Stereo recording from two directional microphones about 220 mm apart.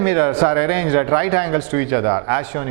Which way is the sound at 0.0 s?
10° right (ahead or behind).